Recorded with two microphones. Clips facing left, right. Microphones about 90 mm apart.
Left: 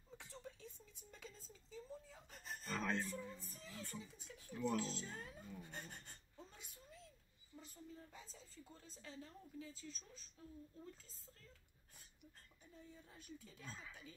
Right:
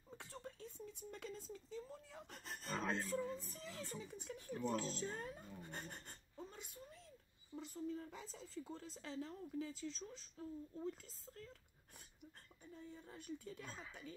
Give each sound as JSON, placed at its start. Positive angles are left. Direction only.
{"t": 0.2, "sound": "speech", "side_deg": -55}
{"t": 2.7, "sound": "speech", "side_deg": -20}
{"t": 3.2, "sound": "speech", "side_deg": -65}
{"t": 7.5, "sound": "speech", "side_deg": -25}
{"t": 7.9, "sound": "speech", "side_deg": -70}
{"t": 12.7, "sound": "speech", "side_deg": -55}